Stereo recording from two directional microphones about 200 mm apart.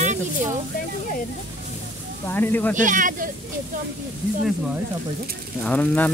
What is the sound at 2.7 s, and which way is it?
Speech, 40° right (ahead or behind).